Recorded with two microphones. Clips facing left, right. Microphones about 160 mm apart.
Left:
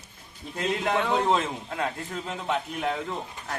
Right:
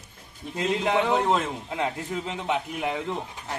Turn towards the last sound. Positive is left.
turn(degrees=-10)  # may be behind; listen again after turning